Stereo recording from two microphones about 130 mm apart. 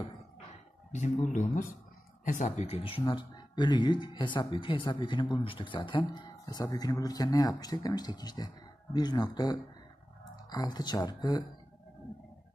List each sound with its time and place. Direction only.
0.9 s speech: 70° left (ahead or behind); by 3.0 s 50° left (ahead or behind)
3.0 s speech: 35° left (ahead or behind)